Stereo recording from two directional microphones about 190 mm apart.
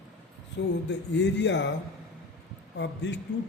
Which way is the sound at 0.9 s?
65° left (ahead or behind).